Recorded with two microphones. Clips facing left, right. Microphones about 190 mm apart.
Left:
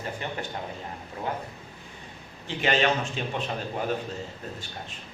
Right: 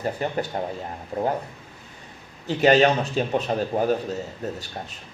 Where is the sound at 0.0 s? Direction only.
40° right (ahead or behind).